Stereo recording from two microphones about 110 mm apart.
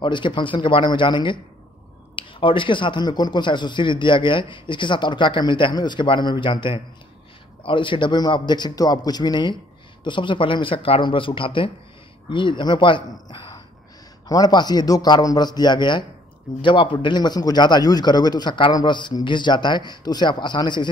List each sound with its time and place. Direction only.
0.0 s a man's voice: 45° left (ahead or behind)
14.2 s a man's voice: 35° left (ahead or behind)